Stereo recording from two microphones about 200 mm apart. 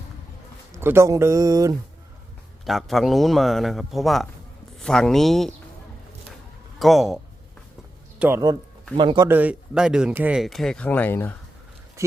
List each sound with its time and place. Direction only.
0.8 s speech: 10° right (ahead or behind)
2.6 s speech: centre (ahead or behind)
6.7 s speech: centre (ahead or behind)
8.2 s a man's voice: 15° right (ahead or behind)
9.3 s speech: 5° right (ahead or behind); by 11.3 s 10° left (ahead or behind)
12.0 s a sound: 15° right (ahead or behind)